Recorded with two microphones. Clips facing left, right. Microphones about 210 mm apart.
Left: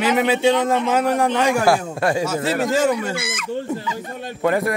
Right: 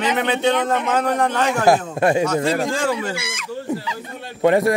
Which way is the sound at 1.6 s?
20° right (ahead or behind).